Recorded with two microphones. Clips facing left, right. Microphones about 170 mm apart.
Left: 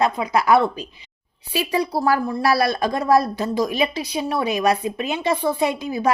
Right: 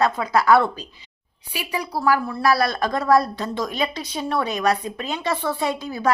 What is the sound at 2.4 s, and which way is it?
A woman's voice, 20° left (ahead or behind).